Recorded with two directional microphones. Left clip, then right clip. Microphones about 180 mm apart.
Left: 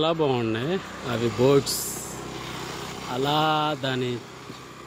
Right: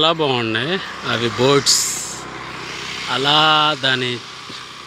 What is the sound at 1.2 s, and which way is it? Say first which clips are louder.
Speech: right 4 dB; 35° right (ahead or behind).